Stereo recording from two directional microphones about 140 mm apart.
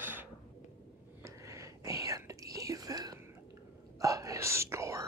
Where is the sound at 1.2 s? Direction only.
20° right (ahead or behind).